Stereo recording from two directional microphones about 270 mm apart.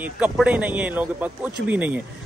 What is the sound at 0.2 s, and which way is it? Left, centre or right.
A man's voice, centre.